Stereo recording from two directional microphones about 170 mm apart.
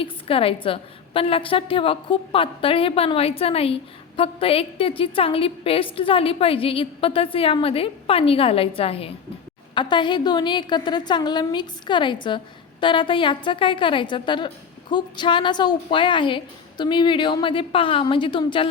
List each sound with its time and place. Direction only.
0.0 s a woman's voice: 35° left (ahead or behind)